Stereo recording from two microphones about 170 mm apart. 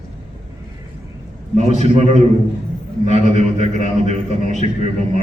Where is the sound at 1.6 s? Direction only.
40° right (ahead or behind).